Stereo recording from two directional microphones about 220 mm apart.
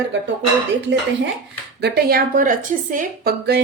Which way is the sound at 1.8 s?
45° right (ahead or behind).